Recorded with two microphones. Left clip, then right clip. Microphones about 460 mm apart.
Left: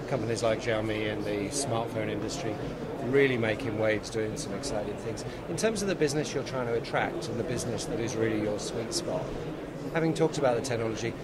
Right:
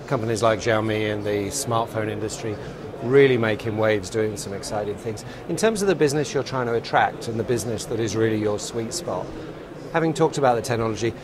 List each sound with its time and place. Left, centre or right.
0.1 s speech: right
5.6 s speech: right
9.9 s speech: right